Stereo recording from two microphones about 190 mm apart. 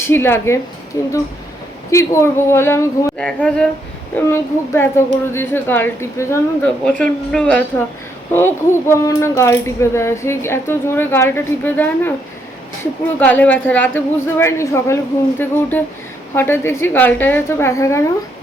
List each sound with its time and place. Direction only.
0.0 s speech: 10° left (ahead or behind)
3.2 s a sound: 5° left (ahead or behind)
4.3 s speech: 15° left (ahead or behind)
16.3 s speech: 10° left (ahead or behind)